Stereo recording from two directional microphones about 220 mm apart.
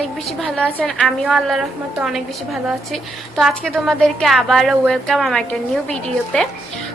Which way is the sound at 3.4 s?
Centre (ahead or behind).